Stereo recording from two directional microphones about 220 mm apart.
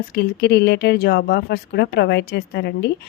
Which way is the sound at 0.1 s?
50° left (ahead or behind).